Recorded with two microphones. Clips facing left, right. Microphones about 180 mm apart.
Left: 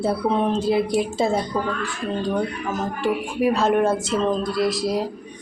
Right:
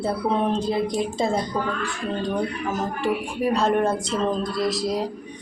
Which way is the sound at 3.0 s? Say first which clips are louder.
Left 2 dB; centre (ahead or behind).